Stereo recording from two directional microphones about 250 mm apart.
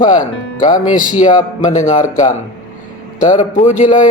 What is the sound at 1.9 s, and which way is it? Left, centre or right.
A man's voice, left.